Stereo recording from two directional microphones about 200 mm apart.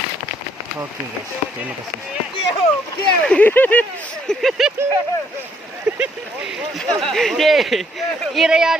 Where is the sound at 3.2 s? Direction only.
5° left (ahead or behind).